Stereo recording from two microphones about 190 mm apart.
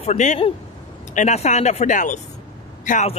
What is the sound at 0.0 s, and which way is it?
A man's voice, 35° left (ahead or behind).